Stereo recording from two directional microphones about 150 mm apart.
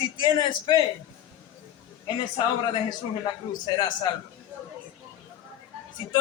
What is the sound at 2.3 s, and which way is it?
A man's voice, 30° left (ahead or behind).